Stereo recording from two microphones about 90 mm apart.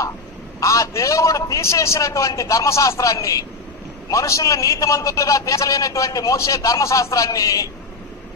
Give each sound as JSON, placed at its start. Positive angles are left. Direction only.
{"t": 0.6, "sound": "a man's voice", "side_deg": 40}